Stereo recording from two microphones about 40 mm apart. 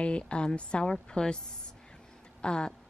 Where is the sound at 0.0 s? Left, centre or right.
Left.